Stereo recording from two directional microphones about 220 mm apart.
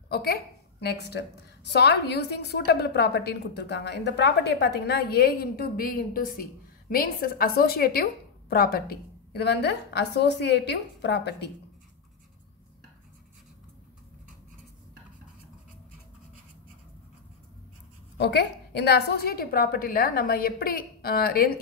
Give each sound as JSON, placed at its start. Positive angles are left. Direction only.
{"t": 0.1, "sound": "a woman's voice", "side_deg": 45}
{"t": 18.1, "sound": "a woman's voice", "side_deg": 50}